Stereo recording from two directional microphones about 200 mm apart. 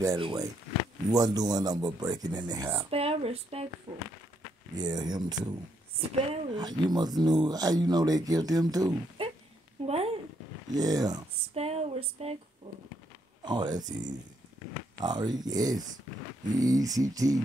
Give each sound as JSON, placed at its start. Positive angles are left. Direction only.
{"t": 0.0, "sound": "music", "side_deg": -20}
{"t": 1.1, "sound": "speech", "side_deg": -20}
{"t": 9.8, "sound": "a sound", "side_deg": -30}
{"t": 10.7, "sound": "speech", "side_deg": -20}
{"t": 11.5, "sound": "a sound", "side_deg": -30}
{"t": 13.5, "sound": "speech", "side_deg": -20}
{"t": 16.5, "sound": "music", "side_deg": -20}